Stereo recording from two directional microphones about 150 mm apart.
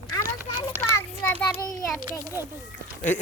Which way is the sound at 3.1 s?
55° left (ahead or behind).